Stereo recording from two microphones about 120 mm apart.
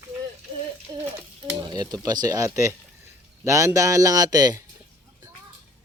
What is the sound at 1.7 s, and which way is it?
A man's voice, 35° right (ahead or behind).